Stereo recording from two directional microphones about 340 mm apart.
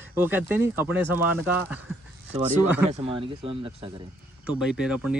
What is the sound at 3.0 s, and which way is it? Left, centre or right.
Speech, centre.